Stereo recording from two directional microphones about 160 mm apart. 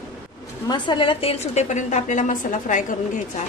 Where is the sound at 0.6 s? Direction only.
30° left (ahead or behind); by 3.0 s 55° left (ahead or behind).